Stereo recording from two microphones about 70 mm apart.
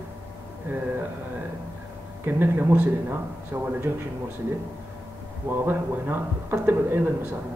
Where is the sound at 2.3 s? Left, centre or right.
Right.